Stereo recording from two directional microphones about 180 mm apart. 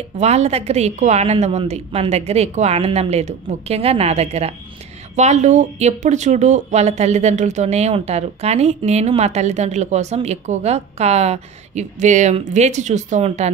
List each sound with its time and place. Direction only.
0.2 s speech: 40° right (ahead or behind)